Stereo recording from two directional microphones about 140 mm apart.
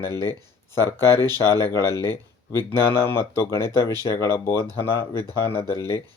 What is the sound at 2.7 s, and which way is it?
Speech, 15° left (ahead or behind).